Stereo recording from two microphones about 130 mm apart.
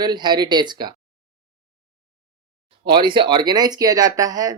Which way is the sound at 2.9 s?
35° right (ahead or behind).